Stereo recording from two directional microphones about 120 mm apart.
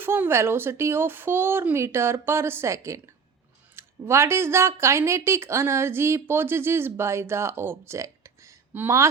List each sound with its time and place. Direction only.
0.0 s speech: 20° right (ahead or behind)